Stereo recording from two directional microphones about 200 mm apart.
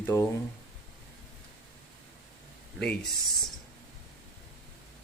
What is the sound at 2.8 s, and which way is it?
Speech, centre (ahead or behind).